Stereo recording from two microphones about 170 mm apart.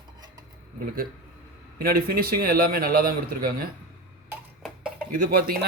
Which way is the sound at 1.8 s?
60° right (ahead or behind).